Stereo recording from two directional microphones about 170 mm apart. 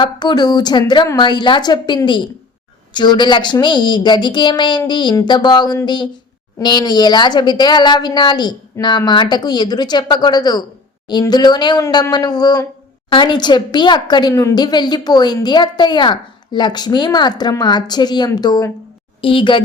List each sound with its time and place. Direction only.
0.0 s a woman's voice: 25° left (ahead or behind)